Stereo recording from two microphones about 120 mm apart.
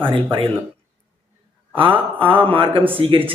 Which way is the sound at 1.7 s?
45° right (ahead or behind).